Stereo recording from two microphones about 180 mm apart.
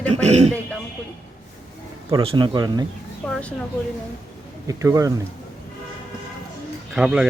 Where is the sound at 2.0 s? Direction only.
25° right (ahead or behind).